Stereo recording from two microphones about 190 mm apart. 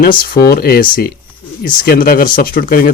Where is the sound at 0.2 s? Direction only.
50° left (ahead or behind).